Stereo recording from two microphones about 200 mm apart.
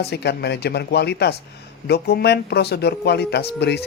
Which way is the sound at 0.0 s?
55° left (ahead or behind).